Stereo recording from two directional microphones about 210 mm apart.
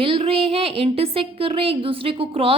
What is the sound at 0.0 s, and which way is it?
A woman's voice, 25° right (ahead or behind).